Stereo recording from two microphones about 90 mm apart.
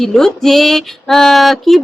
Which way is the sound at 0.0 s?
5° left (ahead or behind).